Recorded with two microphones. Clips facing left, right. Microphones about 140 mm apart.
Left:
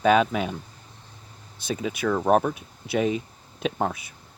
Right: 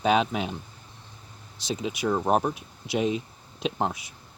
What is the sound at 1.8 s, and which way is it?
Speech, 55° left (ahead or behind).